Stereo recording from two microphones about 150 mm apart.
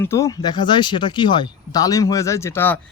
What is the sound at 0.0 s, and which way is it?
Speech, 20° left (ahead or behind).